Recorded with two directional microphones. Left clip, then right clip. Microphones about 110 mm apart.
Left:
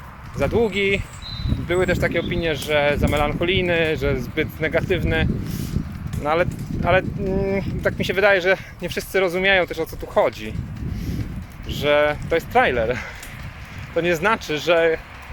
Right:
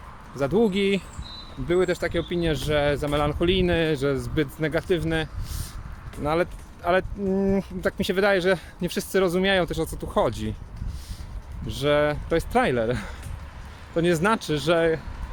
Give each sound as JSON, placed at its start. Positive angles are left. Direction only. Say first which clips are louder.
{"t": 0.3, "sound": "speech", "louder": "left 3 dB", "side_deg": -30}
{"t": 11.7, "sound": "speech", "louder": "left 4 dB", "side_deg": -30}